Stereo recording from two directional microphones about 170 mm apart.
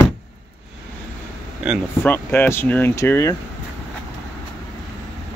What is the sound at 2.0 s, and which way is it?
Speech, 10° left (ahead or behind).